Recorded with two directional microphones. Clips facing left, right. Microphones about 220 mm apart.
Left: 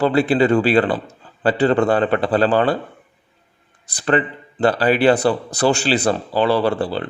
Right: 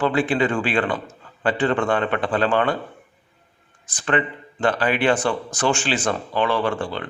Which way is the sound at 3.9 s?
35° left (ahead or behind).